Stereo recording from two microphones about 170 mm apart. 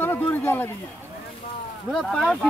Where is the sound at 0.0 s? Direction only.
10° left (ahead or behind).